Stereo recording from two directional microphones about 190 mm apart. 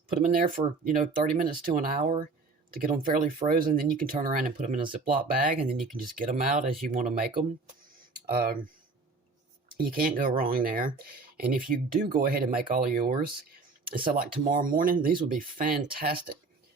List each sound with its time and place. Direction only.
0.2 s speech: 45° right (ahead or behind)
9.7 s speech: 50° right (ahead or behind)